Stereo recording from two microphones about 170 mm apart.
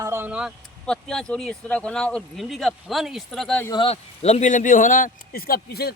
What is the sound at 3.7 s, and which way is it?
Speech, 35° left (ahead or behind).